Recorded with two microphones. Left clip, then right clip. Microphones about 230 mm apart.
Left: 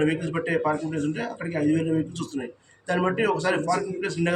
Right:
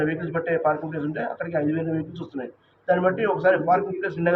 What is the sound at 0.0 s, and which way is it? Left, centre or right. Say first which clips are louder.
A man's voice: even; left.